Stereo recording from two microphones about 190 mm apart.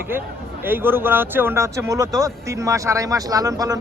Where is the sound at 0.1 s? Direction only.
10° right (ahead or behind).